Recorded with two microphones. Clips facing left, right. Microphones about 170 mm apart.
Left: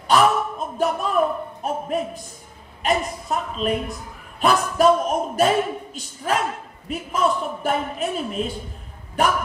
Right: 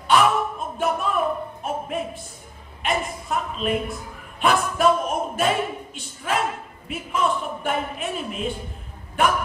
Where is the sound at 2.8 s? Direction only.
40° left (ahead or behind).